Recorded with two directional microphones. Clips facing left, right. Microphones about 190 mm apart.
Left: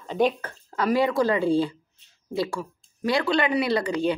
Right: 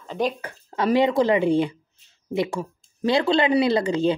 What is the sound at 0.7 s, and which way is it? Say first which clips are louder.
Speech: right 3 dB; 25° right (ahead or behind).